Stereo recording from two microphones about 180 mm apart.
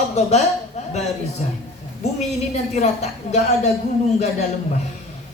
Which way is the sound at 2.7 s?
40° left (ahead or behind).